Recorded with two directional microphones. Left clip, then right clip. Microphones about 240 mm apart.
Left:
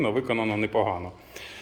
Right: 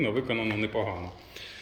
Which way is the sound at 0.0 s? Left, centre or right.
Centre.